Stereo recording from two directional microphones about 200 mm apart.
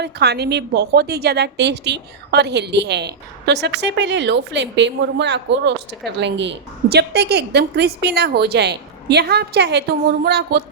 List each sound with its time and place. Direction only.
0.0 s a woman's voice: 55° right (ahead or behind)